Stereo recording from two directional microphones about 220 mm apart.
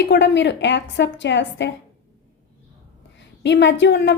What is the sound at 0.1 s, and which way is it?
A woman's voice, 50° left (ahead or behind).